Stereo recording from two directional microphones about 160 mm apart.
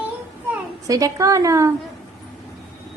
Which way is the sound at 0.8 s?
20° right (ahead or behind).